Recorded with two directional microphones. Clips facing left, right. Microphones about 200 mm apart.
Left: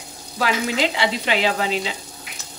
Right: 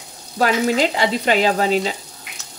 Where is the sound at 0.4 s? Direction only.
45° right (ahead or behind).